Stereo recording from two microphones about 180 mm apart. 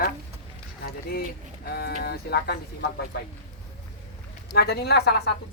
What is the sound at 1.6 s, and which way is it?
Speech, 60° left (ahead or behind).